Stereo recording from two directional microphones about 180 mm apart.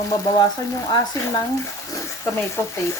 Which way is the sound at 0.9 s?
20° left (ahead or behind).